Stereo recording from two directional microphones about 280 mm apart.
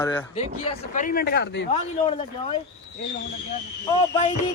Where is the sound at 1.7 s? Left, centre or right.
Centre.